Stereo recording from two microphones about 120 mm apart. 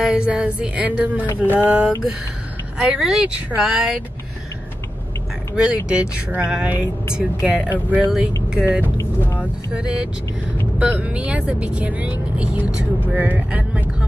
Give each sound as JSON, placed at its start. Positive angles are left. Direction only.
{"t": 0.0, "sound": "speech", "side_deg": -10}
{"t": 1.2, "sound": "speech", "side_deg": 15}
{"t": 2.8, "sound": "speech", "side_deg": -5}
{"t": 5.6, "sound": "speech", "side_deg": -10}
{"t": 8.8, "sound": "speech", "side_deg": 20}
{"t": 9.4, "sound": "speech", "side_deg": -10}